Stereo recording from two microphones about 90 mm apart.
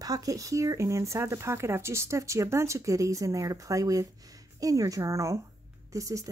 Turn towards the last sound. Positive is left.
turn(degrees=-35)  # may be behind; listen again after turning